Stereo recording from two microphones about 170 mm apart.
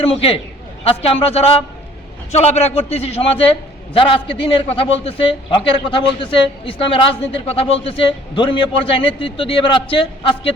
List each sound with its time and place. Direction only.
0.0 s a man's voice: 35° left (ahead or behind)